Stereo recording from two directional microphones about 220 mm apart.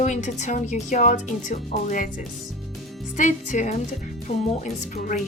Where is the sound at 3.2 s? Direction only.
35° left (ahead or behind).